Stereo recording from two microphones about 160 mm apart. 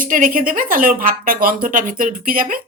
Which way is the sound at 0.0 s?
60° right (ahead or behind).